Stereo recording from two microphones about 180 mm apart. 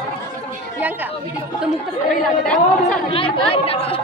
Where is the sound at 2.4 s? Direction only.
5° left (ahead or behind).